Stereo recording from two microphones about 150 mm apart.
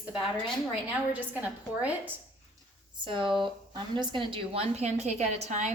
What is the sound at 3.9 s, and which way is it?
A woman's voice, 35° right (ahead or behind).